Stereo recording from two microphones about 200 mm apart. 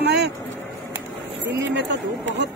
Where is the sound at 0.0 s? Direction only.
55° right (ahead or behind).